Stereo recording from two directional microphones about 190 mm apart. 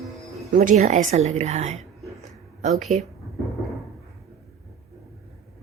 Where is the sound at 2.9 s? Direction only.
35° right (ahead or behind).